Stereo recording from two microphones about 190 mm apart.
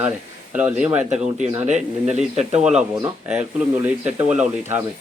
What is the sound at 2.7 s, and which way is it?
Speech, 5° right (ahead or behind).